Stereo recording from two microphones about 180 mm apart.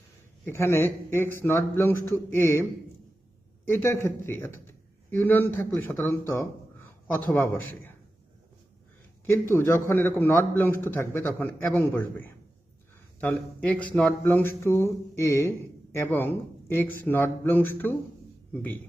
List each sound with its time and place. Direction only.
0.4 s speech: 15° left (ahead or behind)
3.7 s a man's voice: 15° left (ahead or behind)
9.2 s speech: 10° left (ahead or behind)